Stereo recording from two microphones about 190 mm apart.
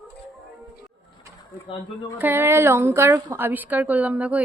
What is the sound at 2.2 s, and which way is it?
A woman's voice, 10° right (ahead or behind).